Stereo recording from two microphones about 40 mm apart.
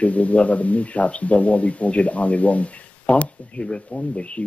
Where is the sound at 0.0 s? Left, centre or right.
Left.